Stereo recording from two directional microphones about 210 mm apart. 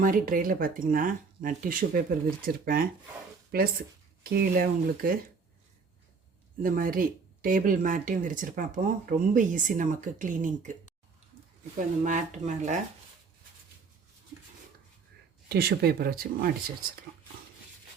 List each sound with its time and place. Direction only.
0.0 s speech: 40° right (ahead or behind)
6.6 s speech: 40° right (ahead or behind)
11.8 s speech: 35° right (ahead or behind)
15.4 s speech: 50° right (ahead or behind)